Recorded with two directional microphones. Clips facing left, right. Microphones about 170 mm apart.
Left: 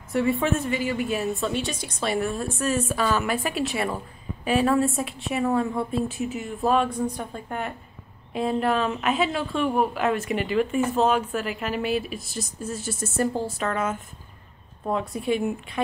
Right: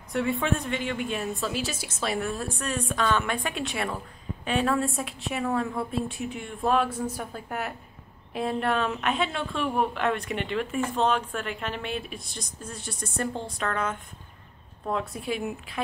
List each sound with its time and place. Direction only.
0.1 s a woman's voice: centre (ahead or behind)